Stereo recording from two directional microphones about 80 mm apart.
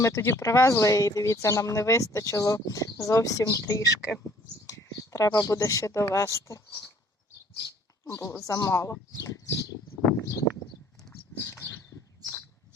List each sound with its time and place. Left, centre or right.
0.1 s speech: left
8.0 s speech: left
11.3 s a sound: left